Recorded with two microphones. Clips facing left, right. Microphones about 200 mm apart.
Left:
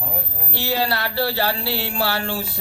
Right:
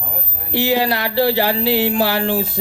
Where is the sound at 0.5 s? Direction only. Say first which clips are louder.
Right 6 dB; 15° right (ahead or behind).